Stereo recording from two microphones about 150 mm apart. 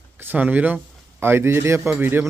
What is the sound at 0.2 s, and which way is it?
Speech, 10° right (ahead or behind).